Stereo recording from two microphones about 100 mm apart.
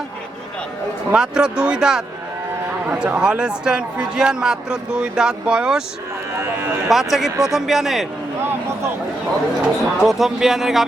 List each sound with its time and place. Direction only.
1.1 s speech: 5° right (ahead or behind)
3.1 s speech: 10° right (ahead or behind)
6.4 s speech: 25° right (ahead or behind)
6.8 s speech: 5° right (ahead or behind)
9.6 s speech: 5° right (ahead or behind)